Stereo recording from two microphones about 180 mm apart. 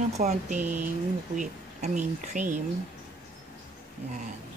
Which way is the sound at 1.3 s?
45° right (ahead or behind).